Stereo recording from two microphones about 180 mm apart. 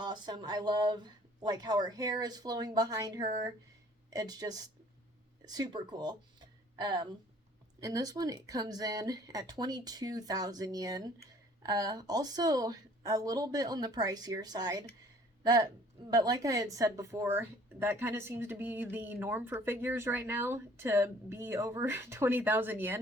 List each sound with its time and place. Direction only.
0.0 s a woman's voice: 25° right (ahead or behind)